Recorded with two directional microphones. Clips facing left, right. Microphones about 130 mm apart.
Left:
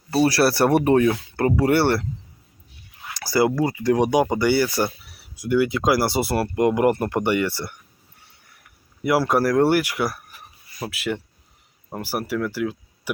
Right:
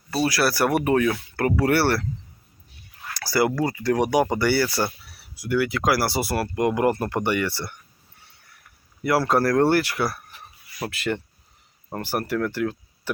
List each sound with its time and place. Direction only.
0.3 s speech: 30° left (ahead or behind)
3.1 s speech: 20° left (ahead or behind)
9.0 s speech: 15° left (ahead or behind)
10.8 s speech: centre (ahead or behind)